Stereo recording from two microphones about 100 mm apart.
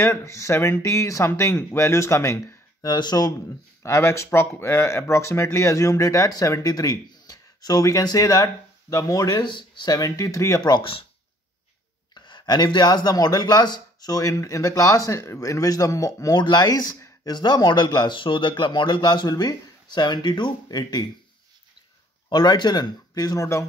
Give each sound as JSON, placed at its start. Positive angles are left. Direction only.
{"t": 0.0, "sound": "speech", "side_deg": 30}
{"t": 2.8, "sound": "speech", "side_deg": 45}
{"t": 3.8, "sound": "speech", "side_deg": 30}
{"t": 10.6, "sound": "speech", "side_deg": 50}
{"t": 12.1, "sound": "speech", "side_deg": 50}
{"t": 16.3, "sound": "speech", "side_deg": 45}
{"t": 22.3, "sound": "speech", "side_deg": 45}